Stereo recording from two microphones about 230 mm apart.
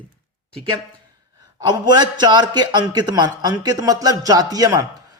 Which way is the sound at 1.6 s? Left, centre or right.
Centre.